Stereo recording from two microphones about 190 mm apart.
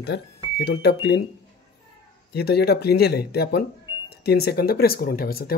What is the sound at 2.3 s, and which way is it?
Speech, 55° left (ahead or behind).